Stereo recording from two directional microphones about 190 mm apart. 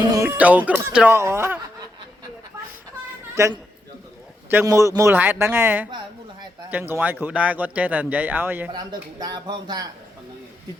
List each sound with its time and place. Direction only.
0.0 s speech: 20° right (ahead or behind)
3.3 s speech: 15° right (ahead or behind)
8.7 s speech: 20° right (ahead or behind)